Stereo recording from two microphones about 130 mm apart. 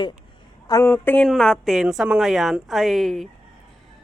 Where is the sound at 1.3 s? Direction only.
5° left (ahead or behind).